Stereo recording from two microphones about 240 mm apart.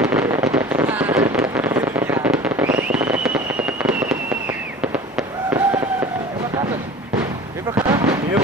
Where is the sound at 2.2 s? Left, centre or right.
Centre.